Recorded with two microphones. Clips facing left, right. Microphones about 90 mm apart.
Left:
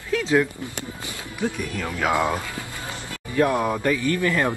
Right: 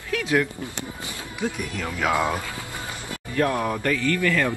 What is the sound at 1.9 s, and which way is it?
Speech, 15° left (ahead or behind).